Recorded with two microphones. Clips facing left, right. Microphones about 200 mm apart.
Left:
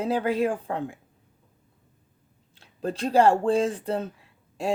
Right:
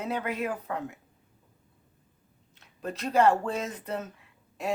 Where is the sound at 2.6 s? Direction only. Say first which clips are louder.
Left 6 dB; 30° left (ahead or behind).